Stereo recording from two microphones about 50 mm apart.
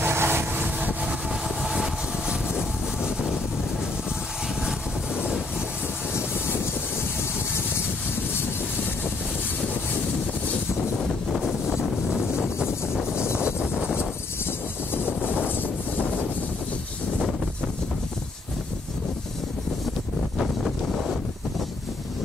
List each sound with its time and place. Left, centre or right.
0.0 s vehicle: right
0.7 s train: right
1.6 s vehicle: centre
2.2 s vehicle: centre
11.1 s a sound: centre
11.6 s wind noise: centre
12.9 s a sound: centre
20.3 s wind: centre